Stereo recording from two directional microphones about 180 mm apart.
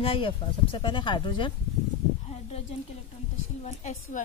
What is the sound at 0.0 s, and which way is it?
Speech, 30° left (ahead or behind).